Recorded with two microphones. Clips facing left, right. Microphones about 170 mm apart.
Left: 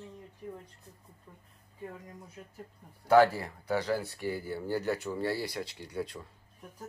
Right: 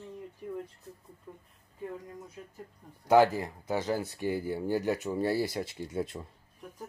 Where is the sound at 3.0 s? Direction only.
15° right (ahead or behind).